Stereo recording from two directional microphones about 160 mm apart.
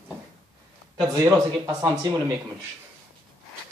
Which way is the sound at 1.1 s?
20° right (ahead or behind).